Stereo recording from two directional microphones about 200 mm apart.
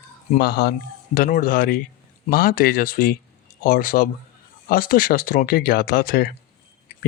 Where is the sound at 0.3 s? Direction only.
50° left (ahead or behind).